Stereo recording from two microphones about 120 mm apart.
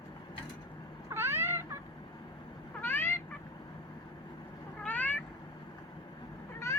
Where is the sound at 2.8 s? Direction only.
15° left (ahead or behind).